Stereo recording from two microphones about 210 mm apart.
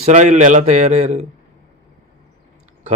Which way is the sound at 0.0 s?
35° right (ahead or behind).